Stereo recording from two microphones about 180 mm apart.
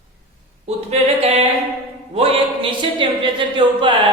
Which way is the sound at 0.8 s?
35° right (ahead or behind).